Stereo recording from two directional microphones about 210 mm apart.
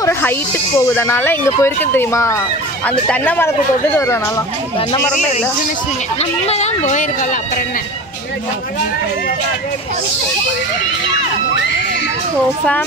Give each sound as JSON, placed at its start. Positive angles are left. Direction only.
{"t": 0.7, "sound": "speech", "side_deg": 10}
{"t": 6.4, "sound": "speech", "side_deg": 30}